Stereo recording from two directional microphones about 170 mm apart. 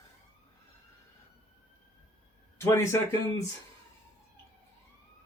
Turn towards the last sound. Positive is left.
turn(degrees=15)  # may be behind; listen again after turning